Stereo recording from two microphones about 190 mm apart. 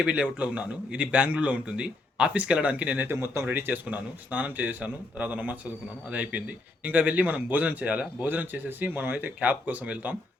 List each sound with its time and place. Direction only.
0.0 s a man's voice: 5° right (ahead or behind)